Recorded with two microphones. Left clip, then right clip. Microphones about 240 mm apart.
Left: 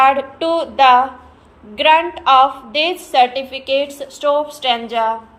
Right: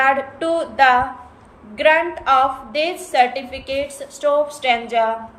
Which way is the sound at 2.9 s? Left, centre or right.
Centre.